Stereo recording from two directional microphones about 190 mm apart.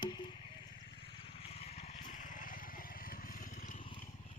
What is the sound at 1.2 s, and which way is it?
Vehicle, 30° left (ahead or behind).